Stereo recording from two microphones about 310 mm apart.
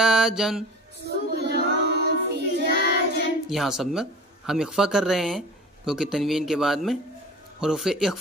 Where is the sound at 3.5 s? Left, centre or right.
Centre.